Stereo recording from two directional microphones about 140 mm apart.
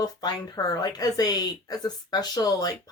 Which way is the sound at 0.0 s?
30° left (ahead or behind).